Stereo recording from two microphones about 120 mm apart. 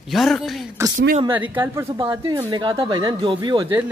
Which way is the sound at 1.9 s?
35° right (ahead or behind).